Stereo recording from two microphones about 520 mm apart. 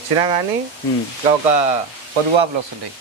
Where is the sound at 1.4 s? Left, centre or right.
Right.